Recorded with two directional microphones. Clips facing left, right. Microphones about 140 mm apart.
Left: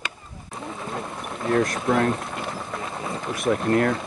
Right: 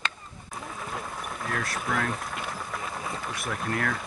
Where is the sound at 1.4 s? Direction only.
25° left (ahead or behind).